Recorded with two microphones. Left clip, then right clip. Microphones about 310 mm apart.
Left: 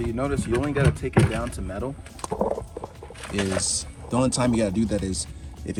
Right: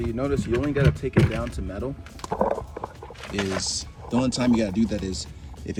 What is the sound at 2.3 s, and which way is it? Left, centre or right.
Clip-clop, left.